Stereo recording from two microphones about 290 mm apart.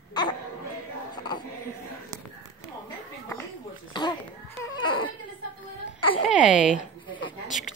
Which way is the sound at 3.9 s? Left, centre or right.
Centre.